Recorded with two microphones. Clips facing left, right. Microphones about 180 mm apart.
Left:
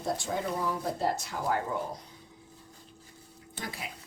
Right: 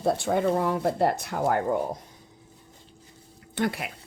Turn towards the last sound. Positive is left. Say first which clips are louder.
# right 12 dB
turn(degrees=-65)  # may be behind; listen again after turning